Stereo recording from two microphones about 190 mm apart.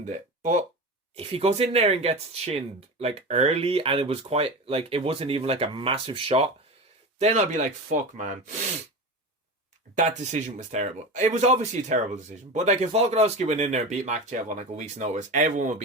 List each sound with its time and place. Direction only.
0.0 s speech: 40° right (ahead or behind)
9.9 s speech: 40° right (ahead or behind)